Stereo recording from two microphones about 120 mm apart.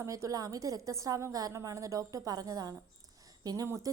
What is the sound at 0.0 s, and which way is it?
A woman's voice, 25° right (ahead or behind).